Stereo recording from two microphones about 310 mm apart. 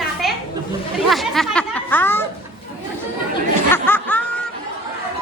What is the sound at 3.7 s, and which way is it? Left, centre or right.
Snicker, centre.